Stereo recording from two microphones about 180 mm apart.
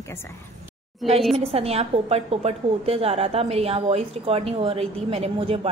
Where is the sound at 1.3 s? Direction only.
35° right (ahead or behind).